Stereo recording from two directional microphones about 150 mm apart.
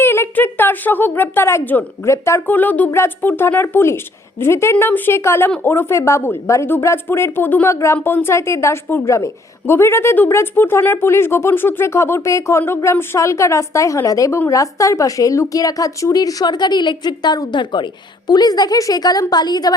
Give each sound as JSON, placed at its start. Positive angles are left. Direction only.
{"t": 0.0, "sound": "a woman's voice", "side_deg": 15}